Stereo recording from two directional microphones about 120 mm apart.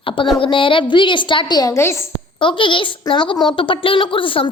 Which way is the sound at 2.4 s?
45° left (ahead or behind).